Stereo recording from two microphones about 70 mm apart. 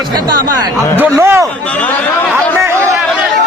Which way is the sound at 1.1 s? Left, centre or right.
Right.